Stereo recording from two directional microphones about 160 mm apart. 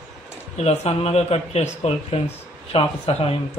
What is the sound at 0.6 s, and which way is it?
Speech, 40° left (ahead or behind).